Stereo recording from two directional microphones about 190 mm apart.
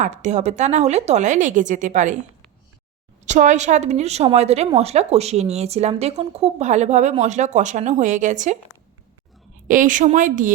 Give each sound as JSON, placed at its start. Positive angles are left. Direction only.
{"t": 0.0, "sound": "a woman's voice", "side_deg": -40}
{"t": 3.2, "sound": "a woman's voice", "side_deg": -40}
{"t": 9.6, "sound": "a woman's voice", "side_deg": -45}